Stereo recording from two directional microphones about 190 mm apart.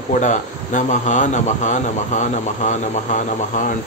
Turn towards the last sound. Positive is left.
turn(degrees=40)  # may be behind; listen again after turning